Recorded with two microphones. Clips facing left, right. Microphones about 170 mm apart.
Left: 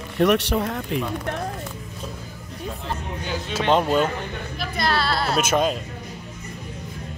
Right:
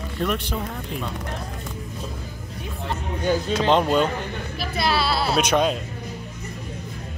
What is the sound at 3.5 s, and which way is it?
Speech, 5° left (ahead or behind).